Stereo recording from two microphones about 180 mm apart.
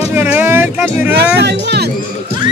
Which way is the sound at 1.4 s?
70° right (ahead or behind).